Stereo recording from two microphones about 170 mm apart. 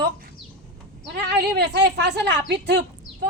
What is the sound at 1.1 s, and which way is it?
Speech, 80° right.